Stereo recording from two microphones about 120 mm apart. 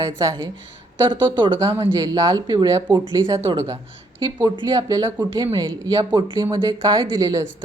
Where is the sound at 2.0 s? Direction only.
35° right (ahead or behind).